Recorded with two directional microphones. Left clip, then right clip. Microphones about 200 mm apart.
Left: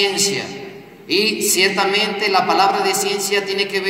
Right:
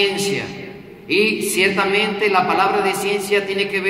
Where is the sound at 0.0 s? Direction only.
45° left (ahead or behind).